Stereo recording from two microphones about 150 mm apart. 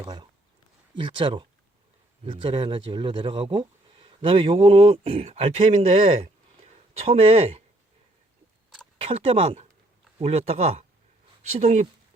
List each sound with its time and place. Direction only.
0.9 s speech: 35° right (ahead or behind)
9.0 s speech: 45° right (ahead or behind)